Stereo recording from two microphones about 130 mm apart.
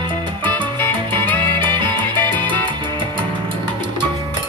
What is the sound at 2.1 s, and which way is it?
Salsa music, 15° left (ahead or behind).